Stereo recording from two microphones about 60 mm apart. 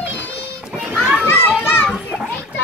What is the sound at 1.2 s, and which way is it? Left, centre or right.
Children playing, left.